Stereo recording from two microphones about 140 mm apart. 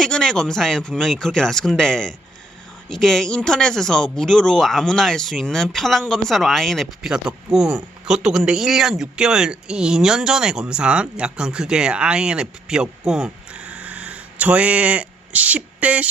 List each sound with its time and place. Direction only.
0.0 s speech: 5° left (ahead or behind)